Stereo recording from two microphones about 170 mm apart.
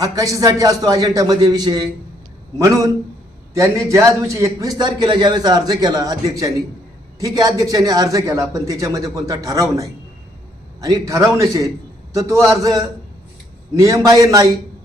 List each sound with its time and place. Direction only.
0.0 s a man's voice: 20° right (ahead or behind)